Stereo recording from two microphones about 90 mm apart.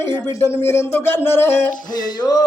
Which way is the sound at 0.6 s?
25° left (ahead or behind).